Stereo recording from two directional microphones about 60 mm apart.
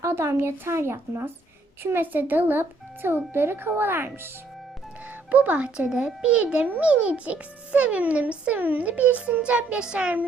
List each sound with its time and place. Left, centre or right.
0.0 s a woman's voice: right
2.1 s a child's voice: right
5.3 s a child's voice: right